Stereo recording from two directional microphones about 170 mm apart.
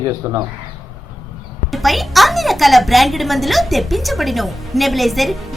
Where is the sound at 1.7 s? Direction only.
Centre (ahead or behind).